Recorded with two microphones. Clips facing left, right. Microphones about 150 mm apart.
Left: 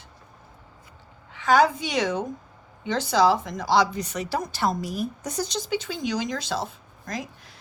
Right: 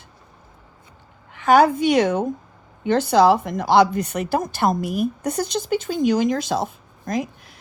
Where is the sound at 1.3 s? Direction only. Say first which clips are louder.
Right 5 dB; 55° right (ahead or behind).